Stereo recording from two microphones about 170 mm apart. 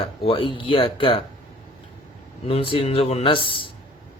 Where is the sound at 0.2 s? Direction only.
30° left (ahead or behind).